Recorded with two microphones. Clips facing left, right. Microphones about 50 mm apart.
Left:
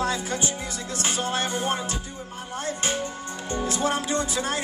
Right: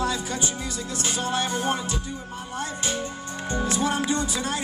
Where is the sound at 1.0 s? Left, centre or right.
Left.